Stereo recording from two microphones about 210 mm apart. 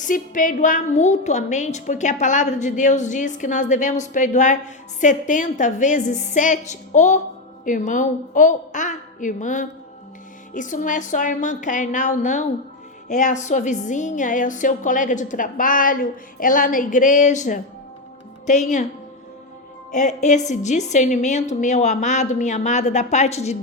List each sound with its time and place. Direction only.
0.0 s a woman's voice: 40° left (ahead or behind)
19.9 s a woman's voice: 35° left (ahead or behind)